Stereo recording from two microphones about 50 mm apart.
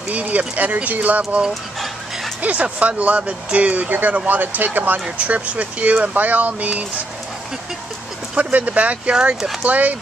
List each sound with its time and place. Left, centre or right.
0.1 s speech: right
1.5 s dog: centre
2.4 s speech: right
8.4 s speech: right